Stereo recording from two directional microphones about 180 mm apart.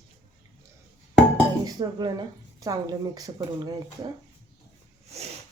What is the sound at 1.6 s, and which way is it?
Speech, 20° right (ahead or behind).